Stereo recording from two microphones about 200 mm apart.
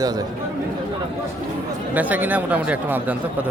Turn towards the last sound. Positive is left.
turn(degrees=-5)  # may be behind; listen again after turning